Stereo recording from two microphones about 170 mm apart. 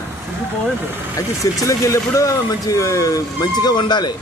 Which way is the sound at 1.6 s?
20° left (ahead or behind).